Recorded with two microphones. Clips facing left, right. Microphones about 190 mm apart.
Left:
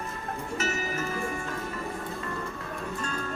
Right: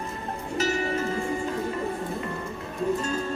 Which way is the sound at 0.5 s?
30° right (ahead or behind).